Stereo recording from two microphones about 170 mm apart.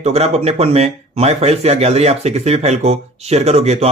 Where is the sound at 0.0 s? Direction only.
40° right (ahead or behind).